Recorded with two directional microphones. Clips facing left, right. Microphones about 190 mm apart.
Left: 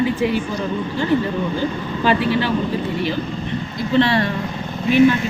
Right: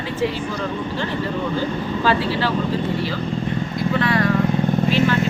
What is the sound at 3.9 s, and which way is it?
Speech, 30° left (ahead or behind).